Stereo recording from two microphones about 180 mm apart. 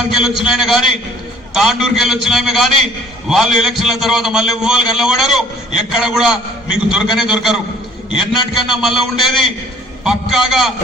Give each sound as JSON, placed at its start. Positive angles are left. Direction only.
{"t": 0.1, "sound": "a man's voice", "side_deg": 0}
{"t": 10.0, "sound": "a man's voice", "side_deg": 0}